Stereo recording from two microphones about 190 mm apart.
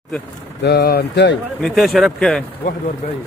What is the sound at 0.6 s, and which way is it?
Speech, 60° left (ahead or behind).